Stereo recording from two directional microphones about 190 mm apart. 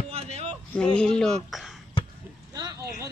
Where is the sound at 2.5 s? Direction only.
20° right (ahead or behind).